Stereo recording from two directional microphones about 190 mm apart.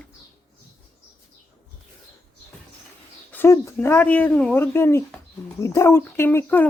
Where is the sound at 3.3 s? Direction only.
15° left (ahead or behind).